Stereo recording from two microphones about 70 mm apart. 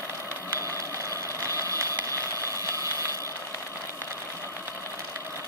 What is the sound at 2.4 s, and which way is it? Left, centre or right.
Engine, right.